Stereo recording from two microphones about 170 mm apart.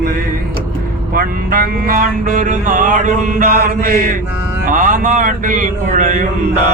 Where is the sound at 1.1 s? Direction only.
55° right (ahead or behind).